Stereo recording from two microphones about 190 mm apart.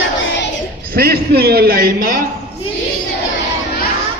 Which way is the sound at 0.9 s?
55° right (ahead or behind).